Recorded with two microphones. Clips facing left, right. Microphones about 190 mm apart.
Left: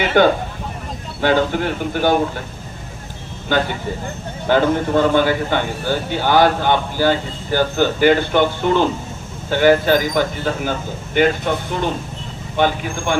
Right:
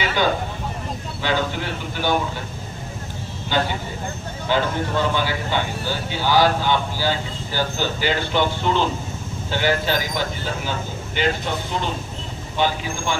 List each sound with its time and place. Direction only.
0.0 s a man's voice: 55° left (ahead or behind)
3.5 s a man's voice: 50° left (ahead or behind)